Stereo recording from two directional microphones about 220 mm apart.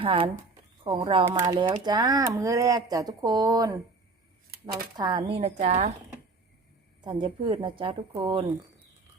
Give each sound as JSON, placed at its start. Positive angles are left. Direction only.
{"t": 0.0, "sound": "a woman's voice", "side_deg": -25}
{"t": 4.9, "sound": "a woman's voice", "side_deg": -20}
{"t": 7.0, "sound": "a woman's voice", "side_deg": -20}